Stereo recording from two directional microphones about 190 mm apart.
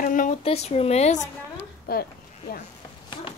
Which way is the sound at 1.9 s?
50° left (ahead or behind).